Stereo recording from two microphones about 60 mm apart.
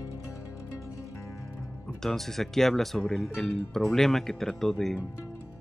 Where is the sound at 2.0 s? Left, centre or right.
Centre.